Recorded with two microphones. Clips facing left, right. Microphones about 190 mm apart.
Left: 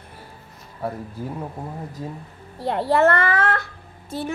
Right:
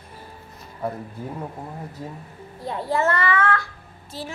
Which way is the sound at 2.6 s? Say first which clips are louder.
Left 5 dB; 70° left (ahead or behind).